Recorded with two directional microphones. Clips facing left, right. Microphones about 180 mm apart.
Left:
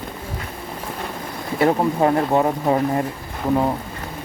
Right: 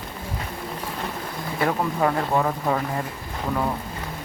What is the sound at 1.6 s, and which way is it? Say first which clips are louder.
Speech: left 6 dB; 25° left (ahead or behind).